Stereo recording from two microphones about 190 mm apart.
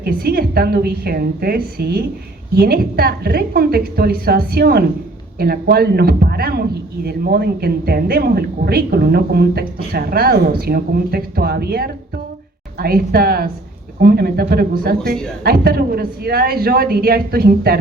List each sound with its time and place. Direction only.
0.0 s a man's voice: 55° right (ahead or behind)